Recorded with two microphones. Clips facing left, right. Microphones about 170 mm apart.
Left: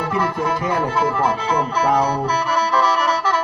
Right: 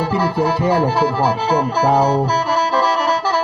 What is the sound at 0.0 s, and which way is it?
Speech, 30° right (ahead or behind).